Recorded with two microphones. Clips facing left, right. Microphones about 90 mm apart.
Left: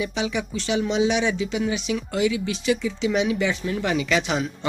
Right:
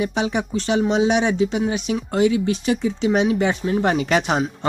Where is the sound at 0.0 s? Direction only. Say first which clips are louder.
Right 4 dB; 45° right (ahead or behind).